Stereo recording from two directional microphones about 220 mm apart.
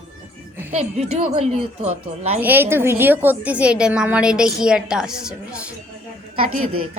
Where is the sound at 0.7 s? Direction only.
30° right (ahead or behind).